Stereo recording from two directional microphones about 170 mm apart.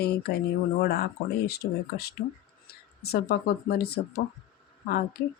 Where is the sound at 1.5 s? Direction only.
65° left (ahead or behind).